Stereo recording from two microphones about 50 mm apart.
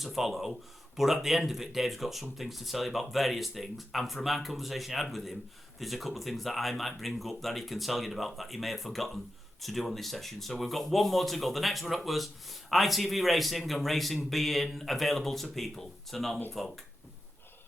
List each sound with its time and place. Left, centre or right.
0.0 s speech: centre